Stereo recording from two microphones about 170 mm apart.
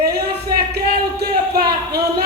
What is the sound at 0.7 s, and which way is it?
Speech, 65° right (ahead or behind).